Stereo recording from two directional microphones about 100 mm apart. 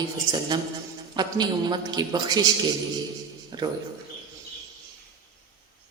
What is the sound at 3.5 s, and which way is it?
Speech, 45° right (ahead or behind).